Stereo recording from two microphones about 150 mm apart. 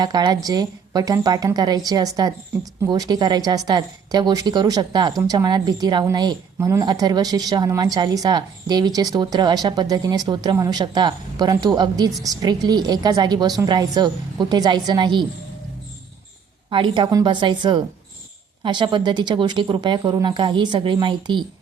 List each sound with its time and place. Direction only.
0.0 s speech: 25° right (ahead or behind)
16.6 s speech: 35° right (ahead or behind)